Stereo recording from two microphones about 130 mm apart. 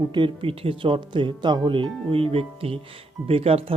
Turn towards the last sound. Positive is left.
turn(degrees=-50)  # may be behind; listen again after turning